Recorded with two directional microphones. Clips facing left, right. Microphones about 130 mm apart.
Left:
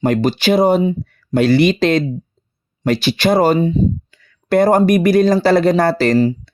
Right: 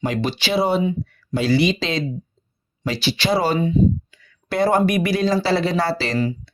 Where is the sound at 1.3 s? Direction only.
60° left (ahead or behind).